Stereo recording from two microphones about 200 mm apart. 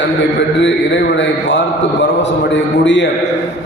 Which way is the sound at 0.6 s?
65° left (ahead or behind).